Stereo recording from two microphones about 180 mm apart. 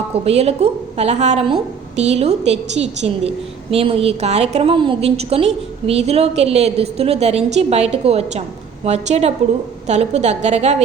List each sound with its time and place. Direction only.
0.1 s a woman's voice: 35° right (ahead or behind)